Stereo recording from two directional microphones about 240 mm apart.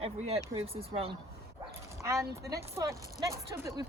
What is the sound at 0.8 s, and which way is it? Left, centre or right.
Speech, right.